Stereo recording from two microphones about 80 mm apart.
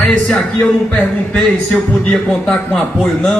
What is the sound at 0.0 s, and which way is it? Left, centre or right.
Speech, centre.